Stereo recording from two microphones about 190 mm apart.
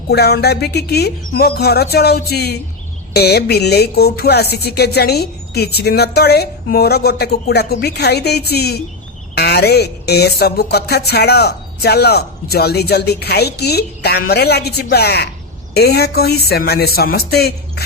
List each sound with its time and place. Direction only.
0.1 s speech: 60° left (ahead or behind)